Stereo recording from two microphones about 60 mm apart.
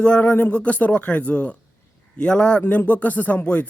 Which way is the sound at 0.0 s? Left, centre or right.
Left.